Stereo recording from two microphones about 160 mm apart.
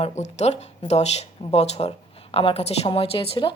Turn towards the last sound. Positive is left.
turn(degrees=35)  # may be behind; listen again after turning